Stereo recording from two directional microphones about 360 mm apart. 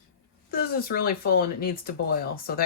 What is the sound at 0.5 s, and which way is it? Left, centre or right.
Speech, left.